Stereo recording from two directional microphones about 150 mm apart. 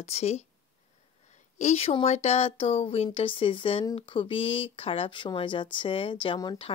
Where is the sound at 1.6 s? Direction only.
45° left (ahead or behind).